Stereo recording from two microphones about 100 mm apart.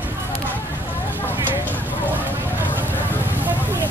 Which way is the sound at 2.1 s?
20° right (ahead or behind).